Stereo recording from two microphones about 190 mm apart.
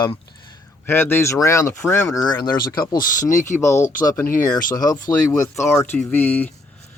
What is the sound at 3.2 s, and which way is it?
Speech, 40° left (ahead or behind).